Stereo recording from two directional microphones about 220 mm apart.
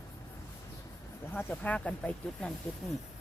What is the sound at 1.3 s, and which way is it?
Speech, 5° left (ahead or behind).